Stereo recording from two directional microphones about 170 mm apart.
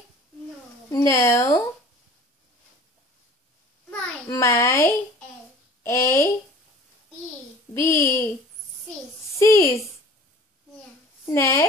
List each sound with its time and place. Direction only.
0.8 s speech: 15° left (ahead or behind)
3.9 s a sound: 15° left (ahead or behind)
7.7 s speech: 15° left (ahead or behind)
9.4 s speech: 15° left (ahead or behind)
11.2 s speech: 15° left (ahead or behind)